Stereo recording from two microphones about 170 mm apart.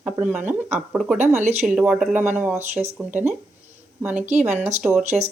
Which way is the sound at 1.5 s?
10° right (ahead or behind).